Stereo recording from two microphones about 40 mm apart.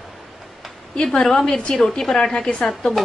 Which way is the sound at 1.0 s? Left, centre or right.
Centre.